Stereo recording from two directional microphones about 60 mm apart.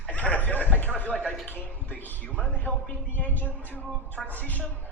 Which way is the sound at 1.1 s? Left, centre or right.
Centre.